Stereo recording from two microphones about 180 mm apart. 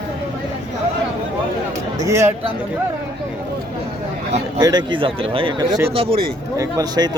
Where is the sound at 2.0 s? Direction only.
15° right (ahead or behind).